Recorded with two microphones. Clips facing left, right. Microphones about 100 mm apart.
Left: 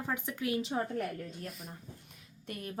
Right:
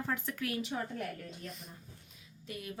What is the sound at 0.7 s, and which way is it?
Speech, 35° left (ahead or behind).